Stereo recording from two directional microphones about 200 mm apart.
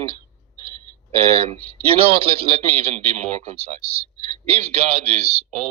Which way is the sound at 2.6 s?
30° right (ahead or behind).